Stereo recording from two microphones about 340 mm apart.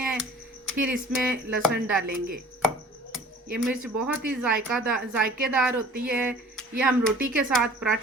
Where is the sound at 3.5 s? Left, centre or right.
Centre.